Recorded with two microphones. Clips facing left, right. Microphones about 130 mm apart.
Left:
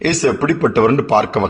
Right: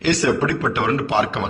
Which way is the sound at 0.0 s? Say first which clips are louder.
Left 3 dB; 40° left (ahead or behind).